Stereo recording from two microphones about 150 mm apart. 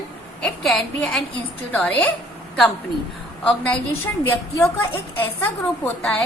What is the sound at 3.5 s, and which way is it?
A woman's voice, 10° left (ahead or behind).